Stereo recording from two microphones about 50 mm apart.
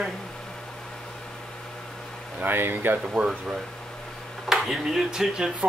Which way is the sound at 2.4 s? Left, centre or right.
Right.